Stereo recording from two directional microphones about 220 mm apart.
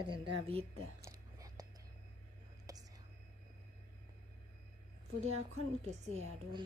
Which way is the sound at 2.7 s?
15° right (ahead or behind).